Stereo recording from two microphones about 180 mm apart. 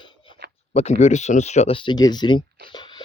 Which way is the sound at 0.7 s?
35° left (ahead or behind).